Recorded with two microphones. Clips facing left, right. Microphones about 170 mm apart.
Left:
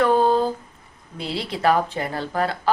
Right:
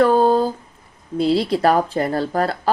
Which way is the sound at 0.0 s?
35° right (ahead or behind).